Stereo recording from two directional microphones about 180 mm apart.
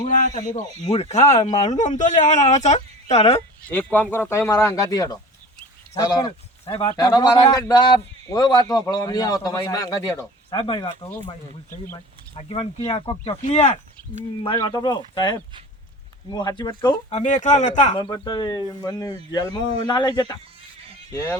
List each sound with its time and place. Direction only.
0.3 s speech: 40° left (ahead or behind)
3.7 s speech: 10° left (ahead or behind); by 7.0 s 30° left (ahead or behind)
7.0 s a man's voice: 20° left (ahead or behind)
12.4 s a man's voice: 30° left (ahead or behind)
13.4 s speech: 40° left (ahead or behind)
14.6 s a man's voice: 25° left (ahead or behind)
17.1 s speech: 40° left (ahead or behind)
17.9 s a man's voice: 25° left (ahead or behind)